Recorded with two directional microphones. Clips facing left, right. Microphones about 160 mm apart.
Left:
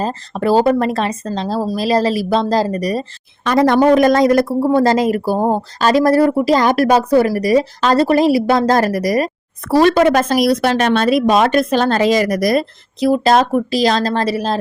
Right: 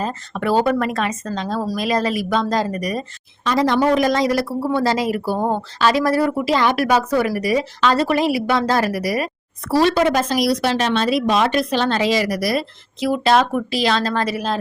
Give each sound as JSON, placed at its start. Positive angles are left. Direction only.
{"t": 0.0, "sound": "speech", "side_deg": 35}
{"t": 3.4, "sound": "speech", "side_deg": 55}